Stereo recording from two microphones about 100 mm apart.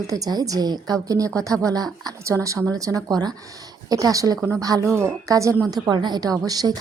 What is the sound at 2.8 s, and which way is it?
Speech, 35° right (ahead or behind).